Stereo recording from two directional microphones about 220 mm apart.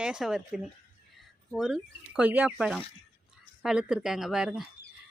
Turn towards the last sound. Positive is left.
turn(degrees=-5)  # may be behind; listen again after turning